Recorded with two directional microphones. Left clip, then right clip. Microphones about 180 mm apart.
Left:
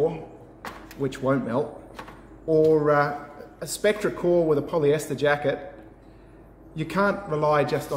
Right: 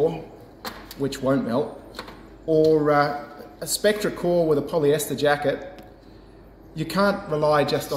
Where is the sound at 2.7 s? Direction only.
25° left (ahead or behind).